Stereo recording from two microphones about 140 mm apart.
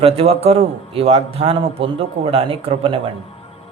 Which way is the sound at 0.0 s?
45° right (ahead or behind).